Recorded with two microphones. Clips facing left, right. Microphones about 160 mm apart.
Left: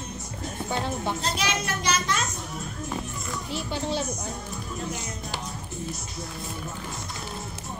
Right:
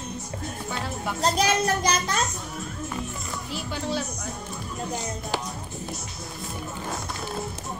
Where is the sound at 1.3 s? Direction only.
40° right (ahead or behind).